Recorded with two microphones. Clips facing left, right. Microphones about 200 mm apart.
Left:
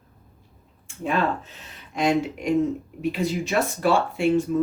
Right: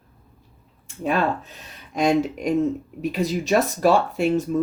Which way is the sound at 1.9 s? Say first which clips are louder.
Right 2 dB; 40° right (ahead or behind).